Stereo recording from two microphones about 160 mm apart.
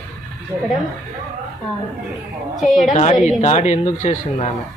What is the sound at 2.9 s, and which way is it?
Speech, 40° left (ahead or behind).